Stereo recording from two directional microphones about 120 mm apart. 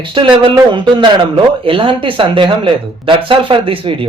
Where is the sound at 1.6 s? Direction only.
45° right (ahead or behind).